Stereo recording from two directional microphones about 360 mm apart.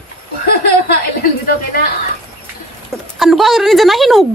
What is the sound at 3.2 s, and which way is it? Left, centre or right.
Speech, centre.